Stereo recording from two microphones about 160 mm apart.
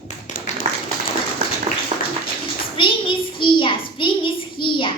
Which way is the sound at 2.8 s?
30° left (ahead or behind).